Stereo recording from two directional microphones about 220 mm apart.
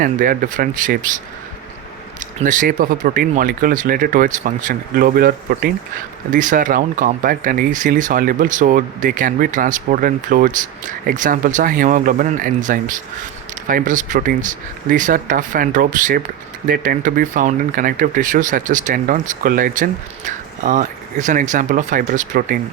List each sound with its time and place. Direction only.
0.0 s speech: 35° right (ahead or behind)
2.4 s speech: 35° right (ahead or behind)